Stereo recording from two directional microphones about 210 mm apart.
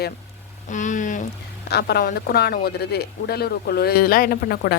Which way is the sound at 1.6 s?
50° left (ahead or behind).